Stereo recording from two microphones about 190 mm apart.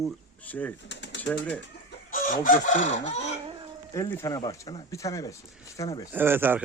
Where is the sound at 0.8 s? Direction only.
70° left (ahead or behind).